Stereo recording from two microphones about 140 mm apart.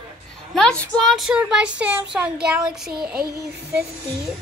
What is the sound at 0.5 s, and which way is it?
Speech, 5° left (ahead or behind).